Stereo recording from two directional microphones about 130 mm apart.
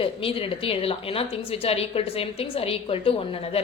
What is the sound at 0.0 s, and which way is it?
A woman's voice, 45° left (ahead or behind).